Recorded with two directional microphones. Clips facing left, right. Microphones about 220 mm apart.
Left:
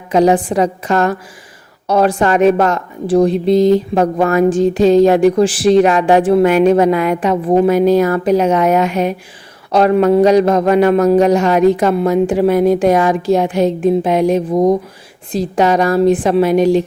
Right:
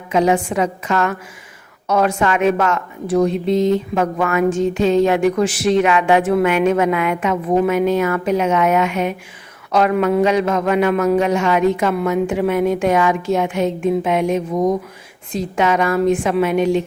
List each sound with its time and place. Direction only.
0.1 s a woman's voice: 35° left (ahead or behind)